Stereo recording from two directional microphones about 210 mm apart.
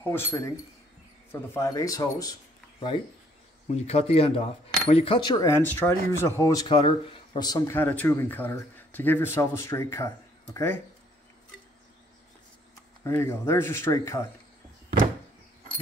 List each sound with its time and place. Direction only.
0.1 s speech: 15° left (ahead or behind)
3.6 s speech: 30° left (ahead or behind); by 10.7 s 15° left (ahead or behind)
13.0 s speech: 15° left (ahead or behind)